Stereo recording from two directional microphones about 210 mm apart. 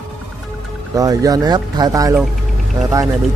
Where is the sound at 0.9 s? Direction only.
15° right (ahead or behind).